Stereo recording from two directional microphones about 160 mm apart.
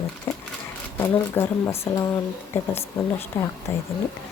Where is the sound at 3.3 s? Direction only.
15° left (ahead or behind).